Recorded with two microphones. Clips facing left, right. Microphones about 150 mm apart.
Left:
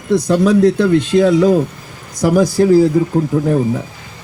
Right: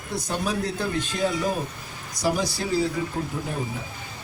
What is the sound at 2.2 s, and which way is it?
Speech, 55° left (ahead or behind).